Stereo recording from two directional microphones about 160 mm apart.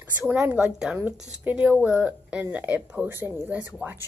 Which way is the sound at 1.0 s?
10° right (ahead or behind).